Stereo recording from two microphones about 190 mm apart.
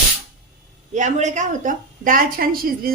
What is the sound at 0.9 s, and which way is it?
A woman's voice, 40° right (ahead or behind).